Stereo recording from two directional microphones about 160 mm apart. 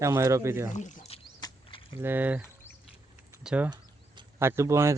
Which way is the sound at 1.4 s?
25° left (ahead or behind).